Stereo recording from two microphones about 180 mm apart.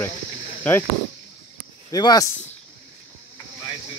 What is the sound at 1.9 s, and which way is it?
Speech, 20° left (ahead or behind).